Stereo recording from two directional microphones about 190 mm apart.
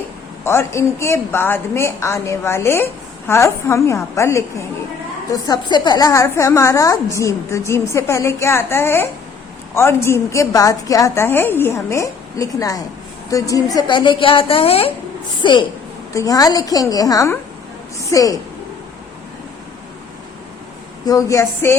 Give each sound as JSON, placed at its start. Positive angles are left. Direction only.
{"t": 0.4, "sound": "a woman's voice", "side_deg": 15}
{"t": 21.0, "sound": "a woman's voice", "side_deg": 20}